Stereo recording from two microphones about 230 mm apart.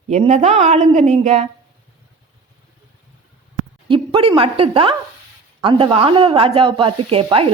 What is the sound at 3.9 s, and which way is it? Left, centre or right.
A woman's voice, right.